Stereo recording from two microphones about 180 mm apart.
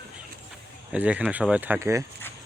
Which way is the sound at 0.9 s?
5° right (ahead or behind).